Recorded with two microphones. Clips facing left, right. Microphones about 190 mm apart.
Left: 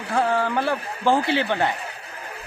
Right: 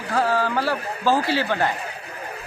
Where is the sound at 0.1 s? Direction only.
20° left (ahead or behind).